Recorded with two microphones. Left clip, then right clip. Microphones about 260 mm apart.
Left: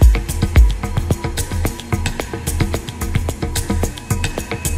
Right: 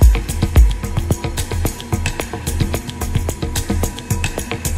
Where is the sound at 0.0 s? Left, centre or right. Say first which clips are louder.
Even; centre.